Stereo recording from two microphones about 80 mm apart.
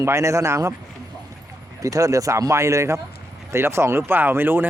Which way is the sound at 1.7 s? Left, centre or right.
Right.